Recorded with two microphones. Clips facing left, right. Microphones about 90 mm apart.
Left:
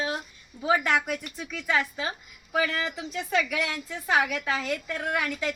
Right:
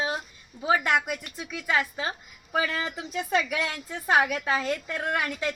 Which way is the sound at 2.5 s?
35° right (ahead or behind).